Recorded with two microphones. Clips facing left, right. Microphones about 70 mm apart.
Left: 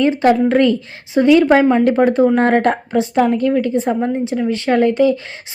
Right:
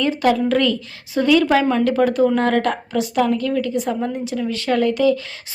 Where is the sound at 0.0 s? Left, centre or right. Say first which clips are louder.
Left 5 dB; left.